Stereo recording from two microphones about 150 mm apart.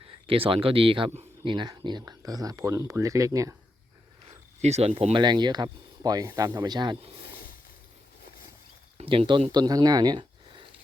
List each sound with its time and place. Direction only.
0.3 s speech: 35° right (ahead or behind); by 3.5 s 20° right (ahead or behind)
4.3 s speech: 45° right (ahead or behind)
5.1 s speech: 30° right (ahead or behind)
9.0 s speech: 35° right (ahead or behind)